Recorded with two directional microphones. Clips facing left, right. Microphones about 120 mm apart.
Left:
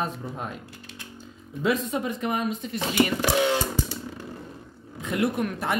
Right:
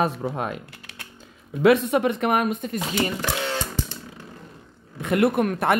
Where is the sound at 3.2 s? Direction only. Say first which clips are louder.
Left 4 dB; 15° left (ahead or behind).